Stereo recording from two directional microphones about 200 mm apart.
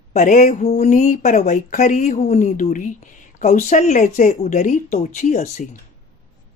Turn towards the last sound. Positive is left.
turn(degrees=35)  # may be behind; listen again after turning